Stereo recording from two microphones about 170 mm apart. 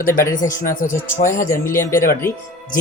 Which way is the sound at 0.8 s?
50° left (ahead or behind).